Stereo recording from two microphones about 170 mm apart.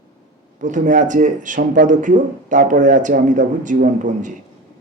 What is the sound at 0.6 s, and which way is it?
Speech, 50° right (ahead or behind).